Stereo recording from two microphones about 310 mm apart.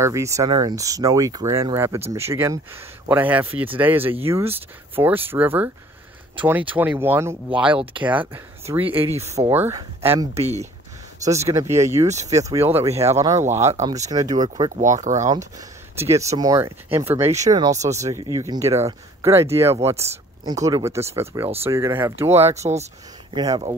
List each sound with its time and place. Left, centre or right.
0.0 s speech: centre
13.9 s speech: right
16.2 s speech: centre
22.4 s speech: right